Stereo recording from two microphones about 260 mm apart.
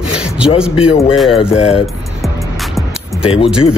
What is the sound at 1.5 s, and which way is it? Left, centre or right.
Speech, left.